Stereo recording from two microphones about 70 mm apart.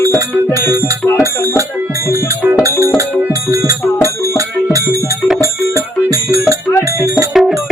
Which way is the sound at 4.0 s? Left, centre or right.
Right.